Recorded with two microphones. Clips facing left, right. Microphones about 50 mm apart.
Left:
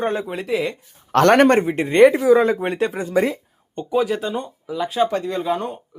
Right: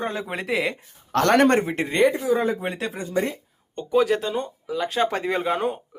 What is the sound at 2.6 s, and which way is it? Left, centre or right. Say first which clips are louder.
Speech: left 7 dB; left.